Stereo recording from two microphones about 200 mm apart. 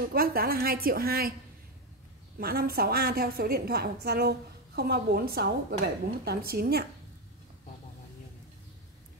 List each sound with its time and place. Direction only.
0.1 s a woman's voice: 50° right (ahead or behind)
2.3 s a woman's voice: 50° right (ahead or behind)